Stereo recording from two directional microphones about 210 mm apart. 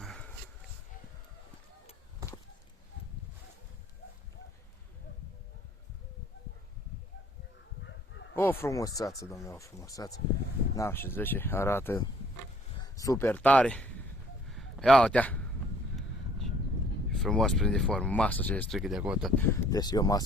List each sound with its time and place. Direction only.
0.0 s a sound: centre (ahead or behind)
7.9 s bow-wow: 60° left (ahead or behind)
8.4 s speech: 10° left (ahead or behind)
14.4 s a sound: centre (ahead or behind)
17.1 s speech: 5° left (ahead or behind)
19.4 s speech: 15° left (ahead or behind)